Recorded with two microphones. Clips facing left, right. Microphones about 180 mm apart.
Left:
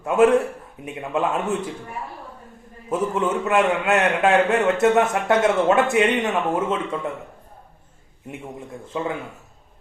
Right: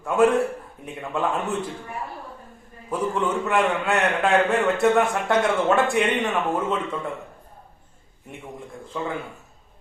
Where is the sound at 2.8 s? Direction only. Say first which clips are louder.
Left 2 dB; 20° left (ahead or behind).